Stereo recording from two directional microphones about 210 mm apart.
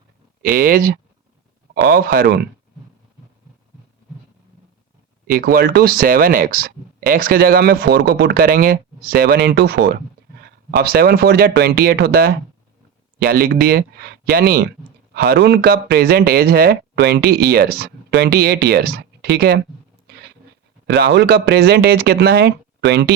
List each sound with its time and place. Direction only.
0.4 s speech: 40° right (ahead or behind)
5.2 s speech: 45° right (ahead or behind)
20.8 s speech: 55° right (ahead or behind)